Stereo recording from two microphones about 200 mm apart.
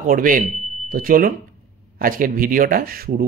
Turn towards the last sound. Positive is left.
turn(degrees=-50)  # may be behind; listen again after turning